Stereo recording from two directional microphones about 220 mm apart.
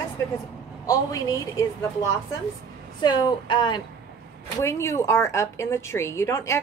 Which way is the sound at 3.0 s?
20° left (ahead or behind).